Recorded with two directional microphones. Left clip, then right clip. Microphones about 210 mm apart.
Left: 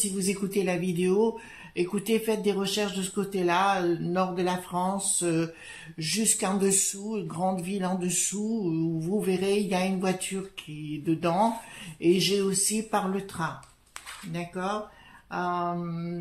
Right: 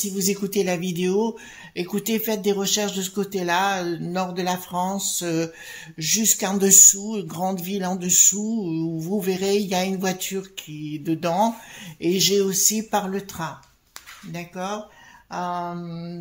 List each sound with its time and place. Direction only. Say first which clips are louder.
0.3 s speech: right 5 dB; 40° right (ahead or behind)